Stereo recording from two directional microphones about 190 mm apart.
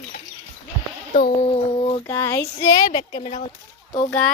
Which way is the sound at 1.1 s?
50° left (ahead or behind).